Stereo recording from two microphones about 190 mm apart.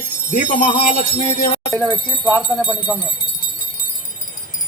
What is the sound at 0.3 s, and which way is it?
Speech, 40° left (ahead or behind).